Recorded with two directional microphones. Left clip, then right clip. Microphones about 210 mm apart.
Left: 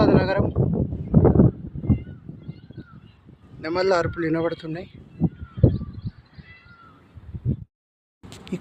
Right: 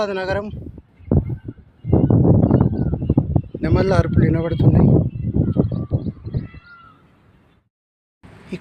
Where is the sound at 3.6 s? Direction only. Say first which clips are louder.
Right 1 dB; centre (ahead or behind).